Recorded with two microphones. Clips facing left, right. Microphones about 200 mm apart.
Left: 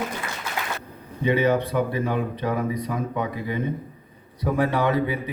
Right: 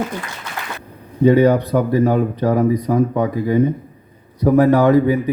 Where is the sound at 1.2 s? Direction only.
40° right (ahead or behind).